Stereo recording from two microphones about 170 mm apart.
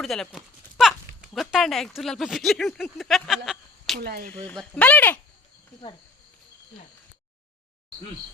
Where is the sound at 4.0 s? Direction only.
70° right (ahead or behind).